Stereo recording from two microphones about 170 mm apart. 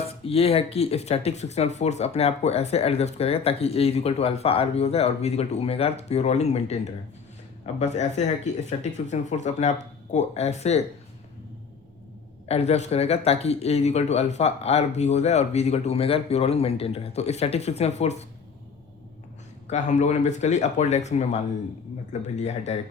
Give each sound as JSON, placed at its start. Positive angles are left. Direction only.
{"t": 0.3, "sound": "speech", "side_deg": 35}
{"t": 12.5, "sound": "speech", "side_deg": 40}
{"t": 19.7, "sound": "speech", "side_deg": 45}